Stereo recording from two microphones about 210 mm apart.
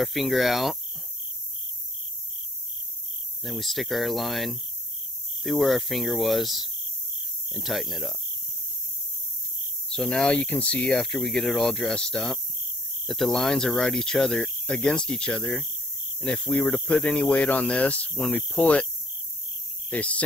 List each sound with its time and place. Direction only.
0.0 s speech: centre (ahead or behind)
3.4 s speech: centre (ahead or behind)
9.8 s speech: 5° left (ahead or behind)
19.9 s speech: 5° left (ahead or behind)